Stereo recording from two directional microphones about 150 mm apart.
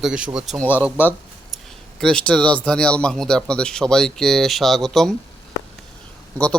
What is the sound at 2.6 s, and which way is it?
Speech, 5° left (ahead or behind).